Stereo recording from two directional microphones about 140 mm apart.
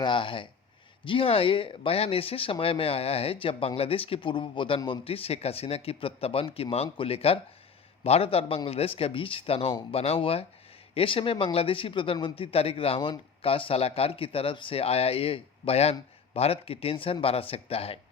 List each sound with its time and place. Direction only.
0.0 s speech: 35° left (ahead or behind)